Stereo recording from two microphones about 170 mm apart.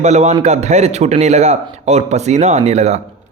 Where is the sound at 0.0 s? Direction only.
40° right (ahead or behind).